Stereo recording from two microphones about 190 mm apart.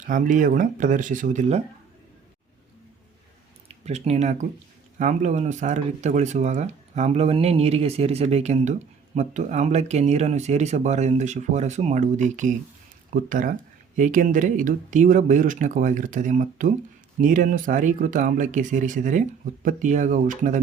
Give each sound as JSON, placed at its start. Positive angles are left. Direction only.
{"t": 0.0, "sound": "speech", "side_deg": -45}
{"t": 3.7, "sound": "speech", "side_deg": -35}